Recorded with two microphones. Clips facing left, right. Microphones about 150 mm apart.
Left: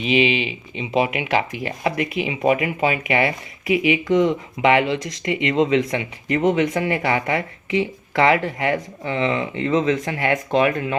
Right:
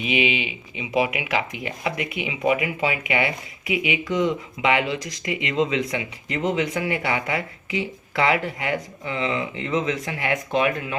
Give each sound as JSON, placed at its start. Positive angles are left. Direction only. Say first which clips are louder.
{"t": 0.1, "sound": "speech", "louder": "left 5 dB", "side_deg": 35}